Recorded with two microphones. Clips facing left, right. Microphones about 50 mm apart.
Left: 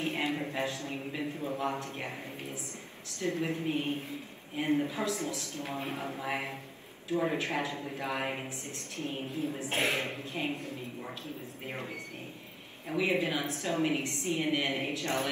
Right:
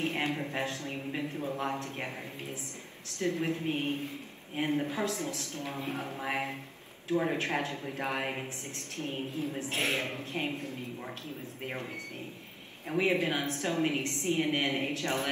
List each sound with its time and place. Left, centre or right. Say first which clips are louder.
0.0 s a sound: even; right
0.5 s a man's voice: even; right
3.3 s a man's voice: even; right
5.7 s speech: even; left
6.1 s a man's voice: right 1 dB; right
9.7 s a man's voice: left 1 dB; left
10.0 s speech: right 1 dB; right
12.9 s a man's voice: right 1 dB; right